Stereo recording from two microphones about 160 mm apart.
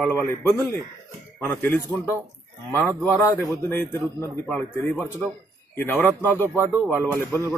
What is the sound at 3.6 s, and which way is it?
Speech, 15° left (ahead or behind).